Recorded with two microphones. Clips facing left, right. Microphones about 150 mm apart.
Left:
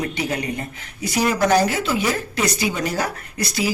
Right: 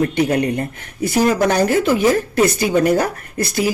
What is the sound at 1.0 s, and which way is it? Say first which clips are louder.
A woman's voice: right 4 dB; 50° right (ahead or behind).